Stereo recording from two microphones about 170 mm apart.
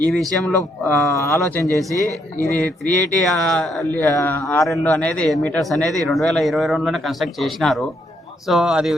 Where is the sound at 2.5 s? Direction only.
5° left (ahead or behind).